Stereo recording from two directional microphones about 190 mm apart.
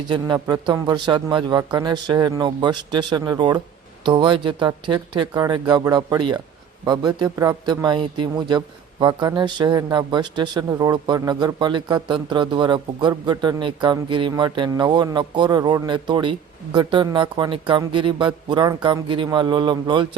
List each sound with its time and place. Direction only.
0.1 s speech: 20° right (ahead or behind)